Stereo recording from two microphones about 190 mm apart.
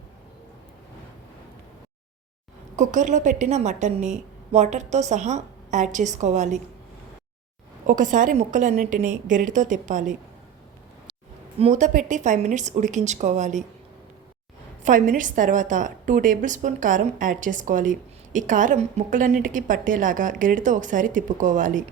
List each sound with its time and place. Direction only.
2.7 s a woman's voice: 40° right (ahead or behind)
7.9 s a woman's voice: 45° right (ahead or behind)
11.6 s a woman's voice: 40° right (ahead or behind)
14.8 s a woman's voice: 45° right (ahead or behind)